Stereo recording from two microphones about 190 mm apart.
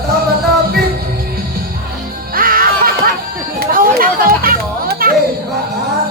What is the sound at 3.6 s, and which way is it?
Children playing, 50° right (ahead or behind).